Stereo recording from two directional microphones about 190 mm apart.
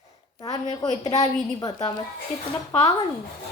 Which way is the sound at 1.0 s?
20° left (ahead or behind).